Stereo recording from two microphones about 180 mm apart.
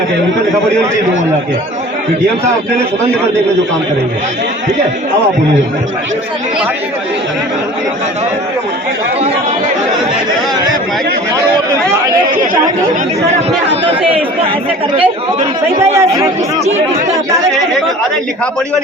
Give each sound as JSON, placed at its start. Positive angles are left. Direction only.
{"t": 14.9, "sound": "speech", "side_deg": -30}
{"t": 16.0, "sound": "speech", "side_deg": -15}